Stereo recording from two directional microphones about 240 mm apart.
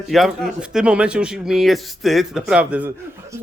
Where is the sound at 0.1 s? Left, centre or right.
Centre.